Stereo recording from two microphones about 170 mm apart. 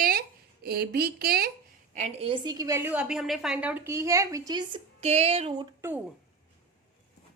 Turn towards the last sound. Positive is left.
turn(degrees=-10)  # may be behind; listen again after turning